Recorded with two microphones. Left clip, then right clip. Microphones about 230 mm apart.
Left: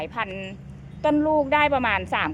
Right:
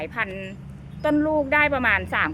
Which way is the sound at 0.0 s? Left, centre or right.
Centre.